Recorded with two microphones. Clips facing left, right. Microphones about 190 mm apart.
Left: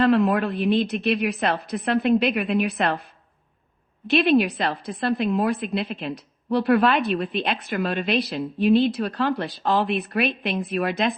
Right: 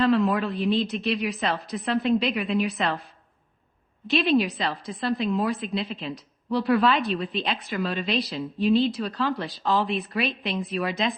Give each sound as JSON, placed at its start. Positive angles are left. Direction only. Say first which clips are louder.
{"t": 0.0, "sound": "a woman's voice", "louder": "left 3 dB", "side_deg": 60}
{"t": 4.0, "sound": "a woman's voice", "louder": "left 3 dB", "side_deg": 60}